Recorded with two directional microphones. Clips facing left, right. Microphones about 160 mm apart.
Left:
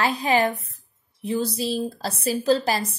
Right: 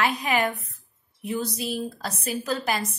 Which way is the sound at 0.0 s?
30° left (ahead or behind).